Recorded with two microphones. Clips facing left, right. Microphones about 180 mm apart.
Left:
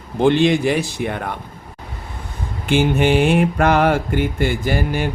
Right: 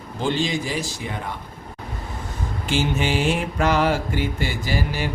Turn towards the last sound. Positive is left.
turn(degrees=55)  # may be behind; listen again after turning